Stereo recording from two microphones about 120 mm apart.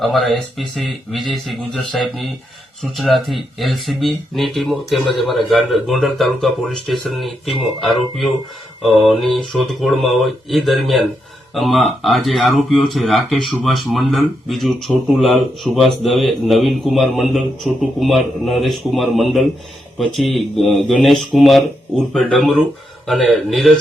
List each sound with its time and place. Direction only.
0.0 s speech: centre (ahead or behind)